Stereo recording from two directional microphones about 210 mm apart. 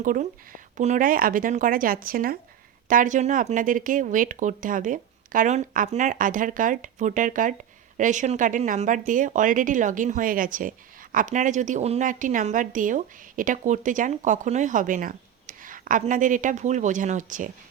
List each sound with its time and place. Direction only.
0.0 s speech: 40° right (ahead or behind)